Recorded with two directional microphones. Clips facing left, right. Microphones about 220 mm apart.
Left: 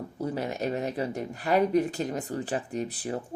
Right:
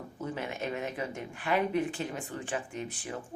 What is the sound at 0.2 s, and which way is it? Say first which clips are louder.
Speech: left 5 dB; 35° left (ahead or behind).